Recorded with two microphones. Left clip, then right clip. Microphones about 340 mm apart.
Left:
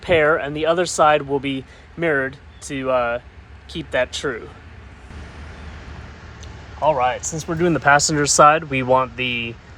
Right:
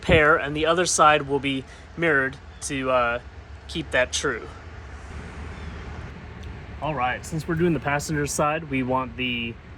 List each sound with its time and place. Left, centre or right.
0.0 s speech: centre
6.8 s speech: centre
7.6 s speech: left
9.3 s speech: left